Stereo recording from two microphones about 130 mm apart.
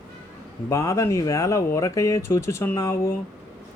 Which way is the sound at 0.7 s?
20° left (ahead or behind).